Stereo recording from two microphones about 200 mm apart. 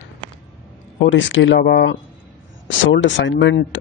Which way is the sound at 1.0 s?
70° left (ahead or behind).